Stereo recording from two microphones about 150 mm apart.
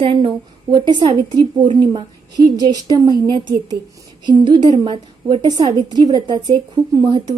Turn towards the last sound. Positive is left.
turn(degrees=-25)  # may be behind; listen again after turning